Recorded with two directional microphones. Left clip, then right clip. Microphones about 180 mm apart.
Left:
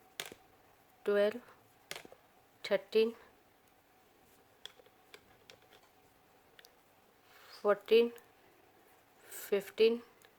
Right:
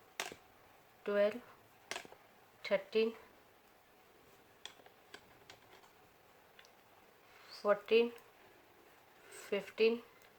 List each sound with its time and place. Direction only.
1.0 s speech: 55° left (ahead or behind)
2.6 s speech: 55° left (ahead or behind)
7.6 s speech: 55° left (ahead or behind)
9.3 s speech: 55° left (ahead or behind)